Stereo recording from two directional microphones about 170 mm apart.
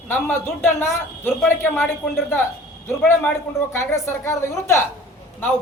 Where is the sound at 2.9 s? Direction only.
15° left (ahead or behind).